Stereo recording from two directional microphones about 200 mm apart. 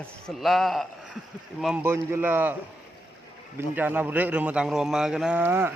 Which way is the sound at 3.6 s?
10° right (ahead or behind).